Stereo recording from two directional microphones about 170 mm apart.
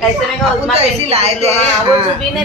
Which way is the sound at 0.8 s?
35° right (ahead or behind).